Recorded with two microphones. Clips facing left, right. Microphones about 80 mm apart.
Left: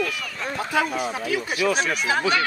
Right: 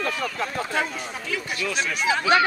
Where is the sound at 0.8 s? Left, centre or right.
Centre.